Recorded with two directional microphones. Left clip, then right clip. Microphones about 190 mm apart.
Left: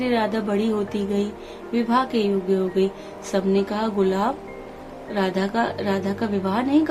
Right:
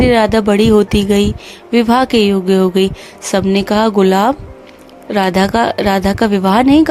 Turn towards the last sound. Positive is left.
turn(degrees=-55)  # may be behind; listen again after turning